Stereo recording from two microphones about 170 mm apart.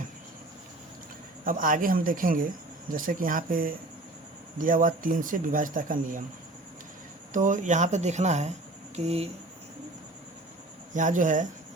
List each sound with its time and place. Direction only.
1.5 s speech: 55° right (ahead or behind)
7.3 s speech: 50° right (ahead or behind)
10.9 s speech: 50° right (ahead or behind)